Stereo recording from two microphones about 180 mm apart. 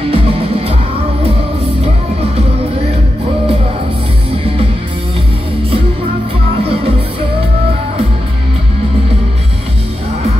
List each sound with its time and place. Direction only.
0.1 s music: 30° right (ahead or behind)